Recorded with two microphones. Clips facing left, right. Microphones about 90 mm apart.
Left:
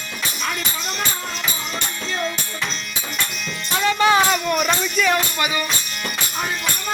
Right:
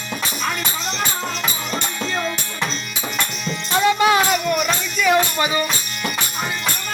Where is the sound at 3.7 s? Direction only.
15° right (ahead or behind).